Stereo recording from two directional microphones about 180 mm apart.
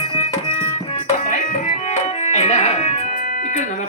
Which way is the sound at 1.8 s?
40° left (ahead or behind).